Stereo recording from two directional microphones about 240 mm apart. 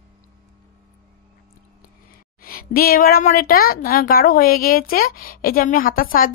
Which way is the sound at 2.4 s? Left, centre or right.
Left.